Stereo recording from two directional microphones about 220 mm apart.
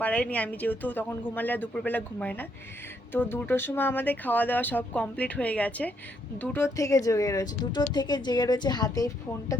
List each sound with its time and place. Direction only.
0.0 s speech: 5° left (ahead or behind)